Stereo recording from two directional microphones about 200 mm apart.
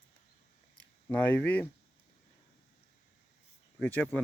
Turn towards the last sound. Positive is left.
turn(degrees=10)  # may be behind; listen again after turning